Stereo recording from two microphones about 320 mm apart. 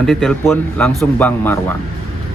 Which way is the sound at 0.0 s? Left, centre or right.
Centre.